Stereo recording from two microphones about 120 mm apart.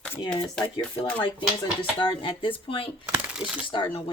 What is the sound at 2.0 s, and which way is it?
Speech, 45° left (ahead or behind).